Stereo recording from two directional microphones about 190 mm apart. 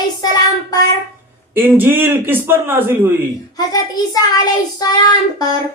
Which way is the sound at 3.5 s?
20° left (ahead or behind).